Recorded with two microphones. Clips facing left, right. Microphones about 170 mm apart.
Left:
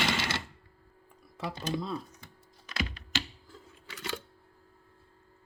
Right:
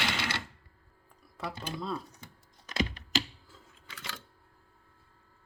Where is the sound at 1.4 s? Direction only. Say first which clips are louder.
Left 2 dB; centre (ahead or behind).